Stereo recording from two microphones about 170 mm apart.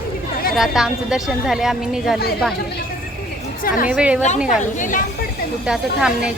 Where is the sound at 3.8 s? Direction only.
5° right (ahead or behind).